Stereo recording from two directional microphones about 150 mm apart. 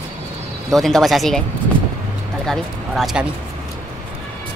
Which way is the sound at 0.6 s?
Centre (ahead or behind).